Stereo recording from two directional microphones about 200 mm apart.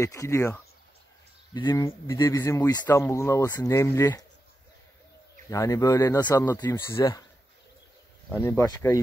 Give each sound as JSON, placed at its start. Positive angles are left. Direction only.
{"t": 0.0, "sound": "speech", "side_deg": 15}
{"t": 5.5, "sound": "speech", "side_deg": 15}
{"t": 8.4, "sound": "speech", "side_deg": 10}